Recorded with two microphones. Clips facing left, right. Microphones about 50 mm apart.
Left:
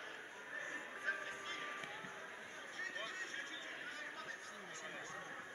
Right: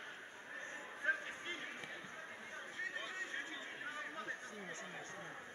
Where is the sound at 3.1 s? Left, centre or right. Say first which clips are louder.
Right 2 dB; centre.